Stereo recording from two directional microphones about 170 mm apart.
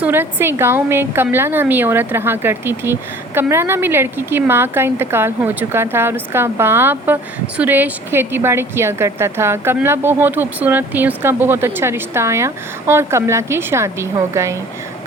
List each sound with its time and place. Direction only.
0.0 s a woman's voice: 10° right (ahead or behind)